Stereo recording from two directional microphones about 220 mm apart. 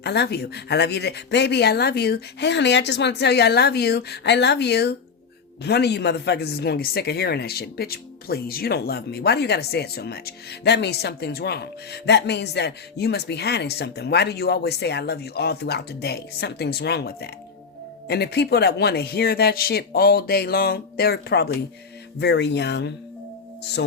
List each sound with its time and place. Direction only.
0.0 s speech: 50° left (ahead or behind)